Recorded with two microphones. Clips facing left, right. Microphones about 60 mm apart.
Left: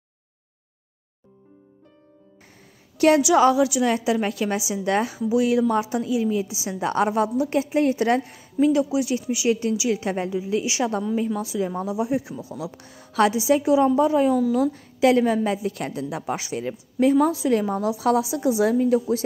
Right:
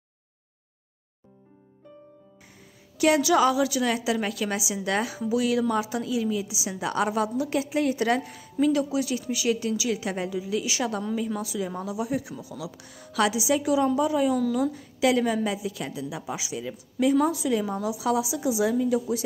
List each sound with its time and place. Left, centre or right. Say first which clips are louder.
3.3 s a woman's voice: left 4 dB; left
14.3 s a woman's voice: left 4 dB; centre
14.7 s a woman's voice: left 5 dB; left
16.7 s speech: left 3 dB; left
17.5 s a woman's voice: left 5 dB; left